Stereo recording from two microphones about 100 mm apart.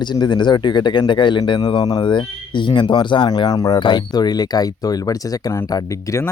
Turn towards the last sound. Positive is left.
turn(degrees=30)  # may be behind; listen again after turning